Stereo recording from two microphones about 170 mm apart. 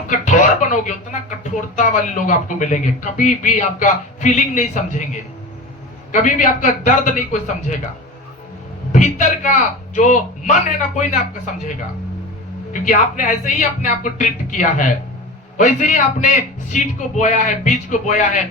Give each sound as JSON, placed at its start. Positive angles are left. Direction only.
{"t": 0.3, "sound": "speech", "side_deg": 45}
{"t": 8.9, "sound": "speech", "side_deg": 45}
{"t": 12.7, "sound": "speech", "side_deg": 45}